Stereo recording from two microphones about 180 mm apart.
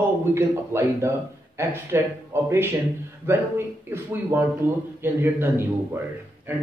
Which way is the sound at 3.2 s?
10° right (ahead or behind).